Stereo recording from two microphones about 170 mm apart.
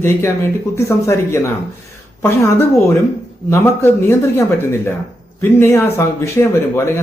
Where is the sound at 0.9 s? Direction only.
15° left (ahead or behind).